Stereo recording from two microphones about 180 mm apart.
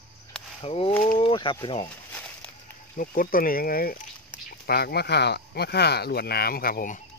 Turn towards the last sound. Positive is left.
turn(degrees=55)  # may be behind; listen again after turning